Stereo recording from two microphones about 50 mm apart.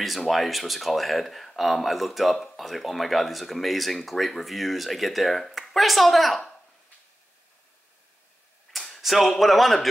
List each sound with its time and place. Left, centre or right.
0.0 s speech: centre
8.7 s speech: centre